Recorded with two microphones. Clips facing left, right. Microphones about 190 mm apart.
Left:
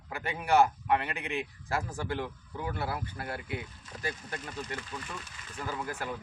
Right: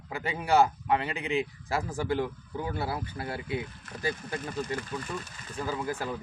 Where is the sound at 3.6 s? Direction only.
60° right (ahead or behind); by 5.8 s 35° right (ahead or behind).